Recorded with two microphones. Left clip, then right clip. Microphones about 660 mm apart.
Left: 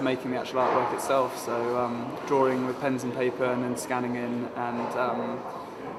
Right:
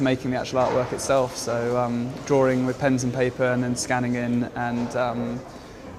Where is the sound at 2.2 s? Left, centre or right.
Right.